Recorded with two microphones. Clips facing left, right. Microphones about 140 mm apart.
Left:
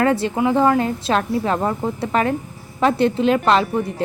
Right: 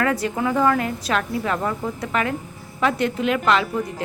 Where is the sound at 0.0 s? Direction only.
30° left (ahead or behind).